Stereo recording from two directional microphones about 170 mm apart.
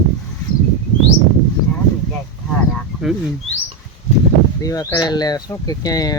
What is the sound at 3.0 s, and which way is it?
Speech, centre (ahead or behind).